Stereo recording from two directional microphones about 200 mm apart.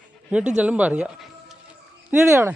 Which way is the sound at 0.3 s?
5° right (ahead or behind).